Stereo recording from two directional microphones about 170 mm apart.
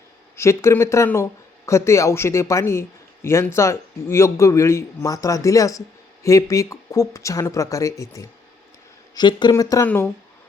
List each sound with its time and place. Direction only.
0.3 s a man's voice: 15° left (ahead or behind)